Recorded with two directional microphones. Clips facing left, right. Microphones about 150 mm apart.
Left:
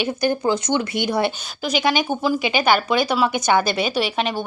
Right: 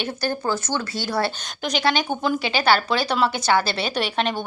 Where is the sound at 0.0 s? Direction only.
15° left (ahead or behind).